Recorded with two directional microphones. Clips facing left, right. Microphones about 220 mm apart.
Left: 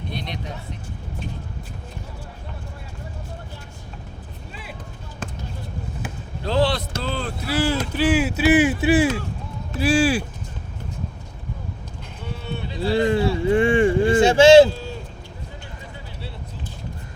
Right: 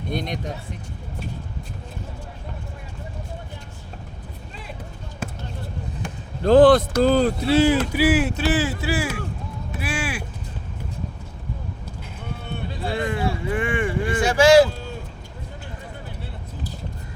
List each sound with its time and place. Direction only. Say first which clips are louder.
0.1 s speech: right 6 dB; 45° right (ahead or behind)
5.2 s basketball bounce: right 2 dB; 10° right (ahead or behind)
6.4 s speech: right 9 dB; 50° right (ahead or behind)
7.4 s speech: right 3 dB; 20° right (ahead or behind)
7.9 s speech: right 1 dB; 5° right (ahead or behind); by 9.0 s 20° left (ahead or behind)
9.8 s speech: left 11 dB; 30° left (ahead or behind)
12.5 s a sound: left 4 dB; 50° right (ahead or behind)
12.9 s speech: left 6 dB; 30° left (ahead or behind)